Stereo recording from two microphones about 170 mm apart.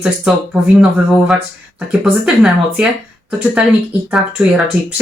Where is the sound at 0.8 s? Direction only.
5° right (ahead or behind).